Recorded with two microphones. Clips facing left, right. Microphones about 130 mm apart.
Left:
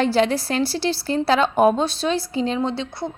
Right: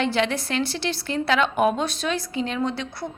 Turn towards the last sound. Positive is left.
turn(degrees=25)  # may be behind; listen again after turning